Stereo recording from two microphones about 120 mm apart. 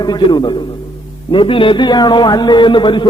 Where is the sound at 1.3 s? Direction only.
45° left (ahead or behind).